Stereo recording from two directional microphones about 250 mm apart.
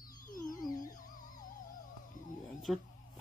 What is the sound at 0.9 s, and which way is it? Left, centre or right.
Music, left.